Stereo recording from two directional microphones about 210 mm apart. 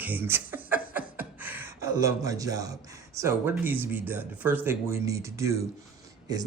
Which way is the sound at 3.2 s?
10° right (ahead or behind).